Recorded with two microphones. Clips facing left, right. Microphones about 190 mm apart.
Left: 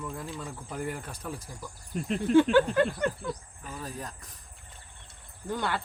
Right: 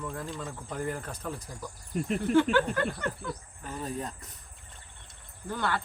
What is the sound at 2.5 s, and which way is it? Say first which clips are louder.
Speech: left 4 dB; 20° left (ahead or behind).